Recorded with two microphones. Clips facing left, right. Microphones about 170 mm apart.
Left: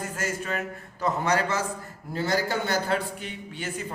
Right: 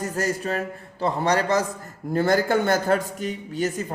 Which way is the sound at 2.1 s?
50° right (ahead or behind).